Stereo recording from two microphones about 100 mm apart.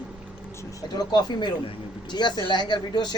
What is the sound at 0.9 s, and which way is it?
Speech, 45° left (ahead or behind).